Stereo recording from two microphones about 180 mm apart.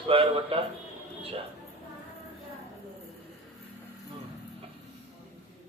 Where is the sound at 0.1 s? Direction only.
30° right (ahead or behind).